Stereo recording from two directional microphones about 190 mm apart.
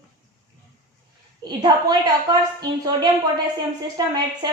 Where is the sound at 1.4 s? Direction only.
20° right (ahead or behind).